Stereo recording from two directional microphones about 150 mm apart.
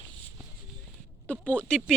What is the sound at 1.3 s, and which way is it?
Speech, 10° left (ahead or behind).